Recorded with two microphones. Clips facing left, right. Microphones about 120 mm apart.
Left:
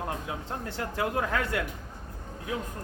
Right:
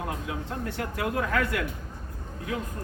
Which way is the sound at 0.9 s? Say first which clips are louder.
Right 1 dB; 25° left (ahead or behind).